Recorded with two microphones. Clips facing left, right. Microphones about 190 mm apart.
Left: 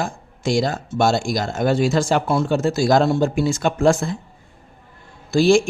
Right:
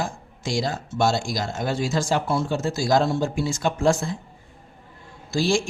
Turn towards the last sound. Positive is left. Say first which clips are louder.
# left 8 dB
turn(degrees=65)  # may be behind; listen again after turning